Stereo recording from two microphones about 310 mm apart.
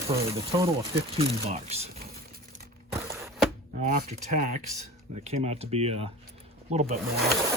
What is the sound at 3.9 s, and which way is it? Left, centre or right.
Speech, right.